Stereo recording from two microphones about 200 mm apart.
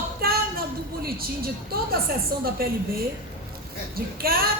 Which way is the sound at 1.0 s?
50° right (ahead or behind).